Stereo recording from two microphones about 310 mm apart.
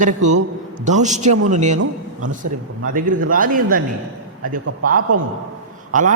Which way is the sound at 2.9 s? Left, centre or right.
Right.